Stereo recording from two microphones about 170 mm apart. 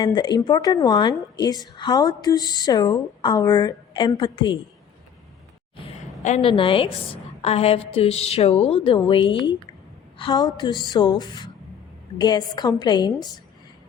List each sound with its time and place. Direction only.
0.0 s a woman's voice: 25° left (ahead or behind)
6.4 s a woman's voice: 30° left (ahead or behind)